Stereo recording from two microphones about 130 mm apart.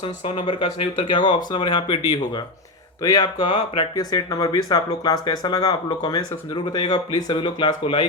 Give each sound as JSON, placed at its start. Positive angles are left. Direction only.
{"t": 0.3, "sound": "speech", "side_deg": 45}